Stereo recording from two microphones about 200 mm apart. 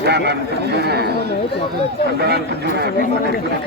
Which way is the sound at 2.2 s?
55° right (ahead or behind).